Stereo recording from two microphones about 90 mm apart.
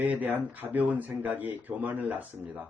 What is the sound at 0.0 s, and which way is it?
Speech, 20° right (ahead or behind).